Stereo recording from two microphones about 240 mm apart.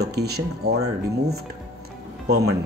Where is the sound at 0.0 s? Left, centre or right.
Right.